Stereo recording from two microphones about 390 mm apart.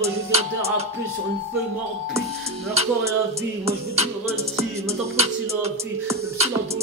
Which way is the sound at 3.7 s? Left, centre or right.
Centre.